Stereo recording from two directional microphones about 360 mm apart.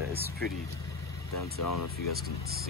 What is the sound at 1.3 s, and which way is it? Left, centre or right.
Speech, left.